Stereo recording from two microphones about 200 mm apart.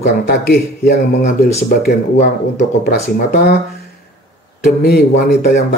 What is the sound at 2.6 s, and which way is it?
Speech, 55° left (ahead or behind).